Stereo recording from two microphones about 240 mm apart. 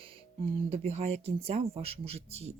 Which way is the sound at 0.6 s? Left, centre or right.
Right.